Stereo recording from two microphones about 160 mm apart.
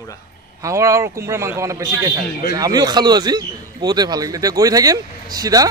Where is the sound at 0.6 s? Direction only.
20° right (ahead or behind).